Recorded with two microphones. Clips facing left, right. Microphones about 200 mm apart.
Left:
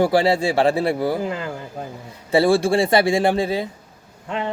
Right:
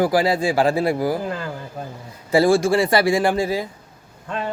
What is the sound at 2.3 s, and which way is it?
Speech, 30° left (ahead or behind).